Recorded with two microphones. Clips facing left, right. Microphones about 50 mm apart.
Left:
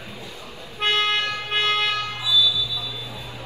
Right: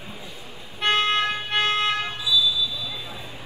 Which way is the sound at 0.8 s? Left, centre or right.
Right.